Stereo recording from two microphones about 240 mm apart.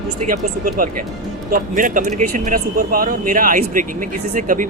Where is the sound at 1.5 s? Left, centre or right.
Right.